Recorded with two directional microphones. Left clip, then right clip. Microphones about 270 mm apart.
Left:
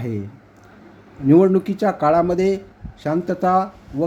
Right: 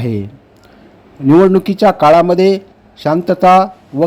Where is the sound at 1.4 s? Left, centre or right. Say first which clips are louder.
Right 7 dB; centre.